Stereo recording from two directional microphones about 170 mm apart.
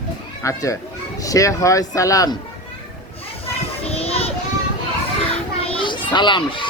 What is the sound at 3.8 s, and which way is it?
Child singing, 35° left (ahead or behind).